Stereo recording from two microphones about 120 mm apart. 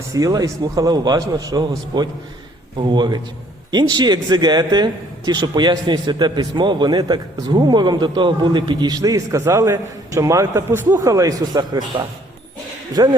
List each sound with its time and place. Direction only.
0.1 s a man's voice: 30° right (ahead or behind)